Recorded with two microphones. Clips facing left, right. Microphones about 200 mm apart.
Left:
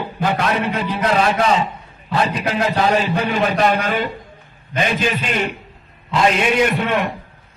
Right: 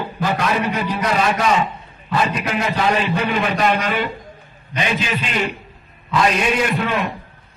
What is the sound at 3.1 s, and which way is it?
Speech, 35° left (ahead or behind).